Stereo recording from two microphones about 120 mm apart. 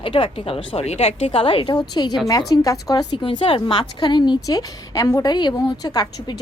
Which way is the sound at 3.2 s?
45° left (ahead or behind).